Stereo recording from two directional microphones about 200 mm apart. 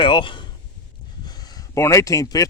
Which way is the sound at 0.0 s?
25° left (ahead or behind).